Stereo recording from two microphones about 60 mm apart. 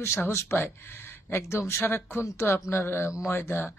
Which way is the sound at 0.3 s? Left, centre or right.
Left.